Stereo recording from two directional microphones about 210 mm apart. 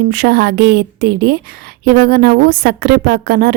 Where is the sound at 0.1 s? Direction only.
50° right (ahead or behind).